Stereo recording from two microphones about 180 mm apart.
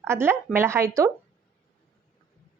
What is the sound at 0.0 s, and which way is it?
Speech, 15° right (ahead or behind).